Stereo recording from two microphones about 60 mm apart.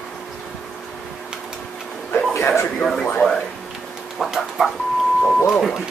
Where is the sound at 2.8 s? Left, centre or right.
Centre.